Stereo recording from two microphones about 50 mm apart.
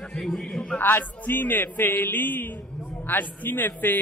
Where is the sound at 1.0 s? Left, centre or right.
Left.